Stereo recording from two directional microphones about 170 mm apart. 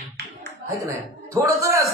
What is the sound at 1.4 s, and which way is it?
Speech, 20° right (ahead or behind).